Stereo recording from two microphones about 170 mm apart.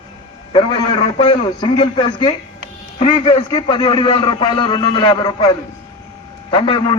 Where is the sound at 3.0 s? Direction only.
30° left (ahead or behind).